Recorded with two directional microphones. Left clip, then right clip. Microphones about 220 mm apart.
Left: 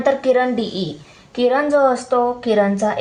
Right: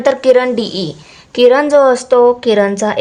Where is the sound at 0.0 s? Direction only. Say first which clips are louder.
Right 6 dB; 45° right (ahead or behind).